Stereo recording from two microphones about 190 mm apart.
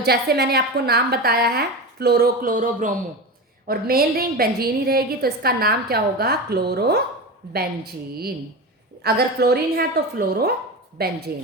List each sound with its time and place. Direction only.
0.0 s a woman's voice: 55° right (ahead or behind)